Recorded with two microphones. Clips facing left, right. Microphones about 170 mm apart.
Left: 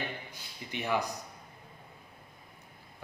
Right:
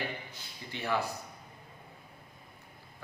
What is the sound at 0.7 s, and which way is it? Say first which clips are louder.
Speech: left 1 dB; 15° left (ahead or behind).